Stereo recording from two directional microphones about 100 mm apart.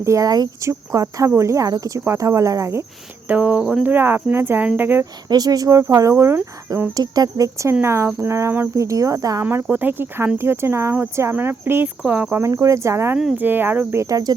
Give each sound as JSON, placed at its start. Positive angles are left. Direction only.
{"t": 0.0, "sound": "speech", "side_deg": -30}
{"t": 3.2, "sound": "cricket", "side_deg": -15}
{"t": 3.6, "sound": "speech", "side_deg": -5}
{"t": 3.8, "sound": "speech", "side_deg": -20}
{"t": 5.3, "sound": "speech", "side_deg": -40}
{"t": 6.9, "sound": "speech", "side_deg": -40}
{"t": 9.4, "sound": "speech", "side_deg": -20}
{"t": 12.4, "sound": "speech", "side_deg": -30}